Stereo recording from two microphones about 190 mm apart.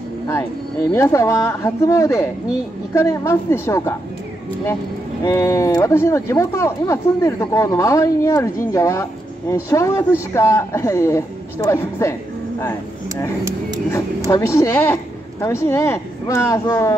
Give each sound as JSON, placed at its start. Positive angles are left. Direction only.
{"t": 0.9, "sound": "speech", "side_deg": 15}
{"t": 5.2, "sound": "speech", "side_deg": 15}
{"t": 14.3, "sound": "speech", "side_deg": 15}